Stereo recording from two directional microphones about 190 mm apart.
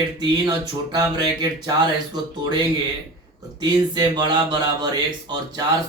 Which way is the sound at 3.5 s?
20° right (ahead or behind).